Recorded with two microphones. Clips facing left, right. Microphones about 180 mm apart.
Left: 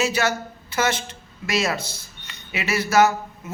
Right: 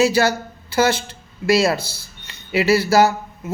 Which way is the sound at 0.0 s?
35° right (ahead or behind).